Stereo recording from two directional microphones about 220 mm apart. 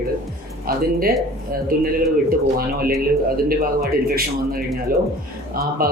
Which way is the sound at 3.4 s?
45° right (ahead or behind).